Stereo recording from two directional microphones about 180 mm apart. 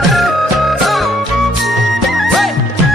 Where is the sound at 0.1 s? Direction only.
Centre (ahead or behind).